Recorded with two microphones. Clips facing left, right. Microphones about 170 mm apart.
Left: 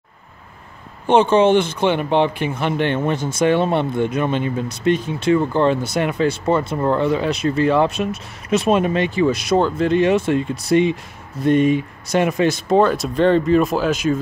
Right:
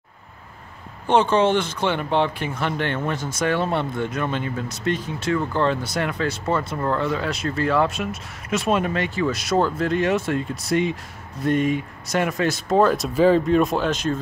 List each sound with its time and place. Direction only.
1.0 s speech: 20° left (ahead or behind)
12.7 s speech: centre (ahead or behind)